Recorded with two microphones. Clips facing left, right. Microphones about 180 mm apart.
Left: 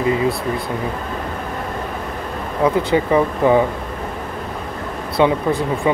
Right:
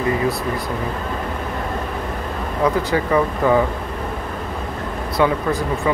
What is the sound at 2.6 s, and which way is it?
Speech, 20° left (ahead or behind).